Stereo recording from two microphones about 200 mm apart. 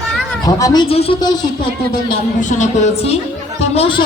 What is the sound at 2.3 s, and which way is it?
Speech, 40° left (ahead or behind).